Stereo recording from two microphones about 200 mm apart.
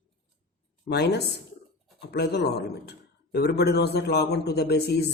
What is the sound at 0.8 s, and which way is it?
Speech, 55° left (ahead or behind).